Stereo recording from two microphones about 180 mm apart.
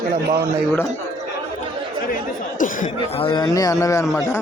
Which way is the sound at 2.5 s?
45° left (ahead or behind).